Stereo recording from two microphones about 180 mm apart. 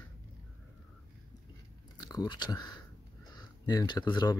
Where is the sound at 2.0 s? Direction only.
20° left (ahead or behind).